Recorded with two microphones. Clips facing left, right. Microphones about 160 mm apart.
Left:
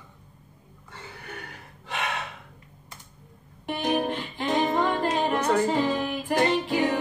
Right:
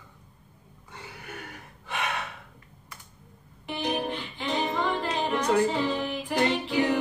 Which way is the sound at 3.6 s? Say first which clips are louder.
Left 4 dB; 45° left (ahead or behind).